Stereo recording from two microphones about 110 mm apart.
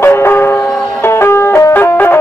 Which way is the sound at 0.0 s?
20° left (ahead or behind).